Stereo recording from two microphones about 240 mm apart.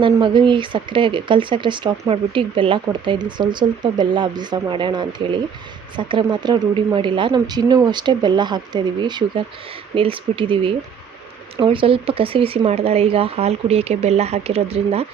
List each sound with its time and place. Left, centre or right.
0.0 s speech: centre